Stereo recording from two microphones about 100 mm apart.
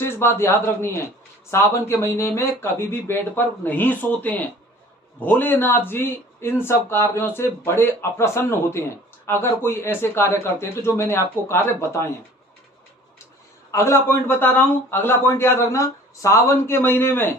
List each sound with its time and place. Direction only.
0.0 s a man's voice: 25° left (ahead or behind)
13.7 s a man's voice: 30° left (ahead or behind)